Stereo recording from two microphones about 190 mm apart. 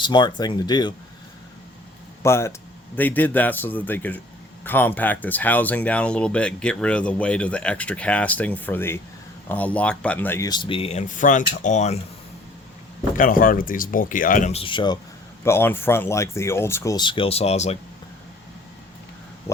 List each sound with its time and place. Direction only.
0.0 s speech: 25° left (ahead or behind)
2.2 s speech: 15° left (ahead or behind); by 11.9 s 40° left (ahead or behind)
13.1 s speech: 45° left (ahead or behind); by 14.9 s 25° left (ahead or behind)
15.4 s speech: 10° left (ahead or behind); by 17.7 s 35° left (ahead or behind)